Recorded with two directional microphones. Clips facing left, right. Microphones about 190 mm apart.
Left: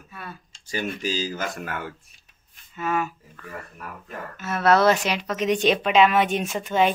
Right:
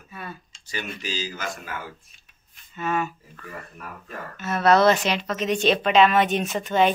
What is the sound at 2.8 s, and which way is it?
Speech, 5° left (ahead or behind).